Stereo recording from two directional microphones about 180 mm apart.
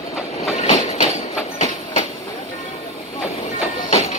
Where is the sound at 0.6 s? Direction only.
35° left (ahead or behind).